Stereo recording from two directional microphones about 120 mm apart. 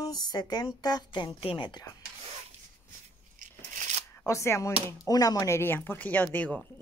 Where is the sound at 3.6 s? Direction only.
85° right.